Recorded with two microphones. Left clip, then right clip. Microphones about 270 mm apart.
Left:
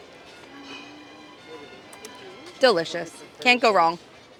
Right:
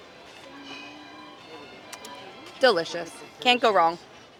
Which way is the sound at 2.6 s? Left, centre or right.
Centre.